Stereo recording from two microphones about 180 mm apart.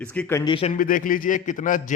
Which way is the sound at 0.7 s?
50° left (ahead or behind).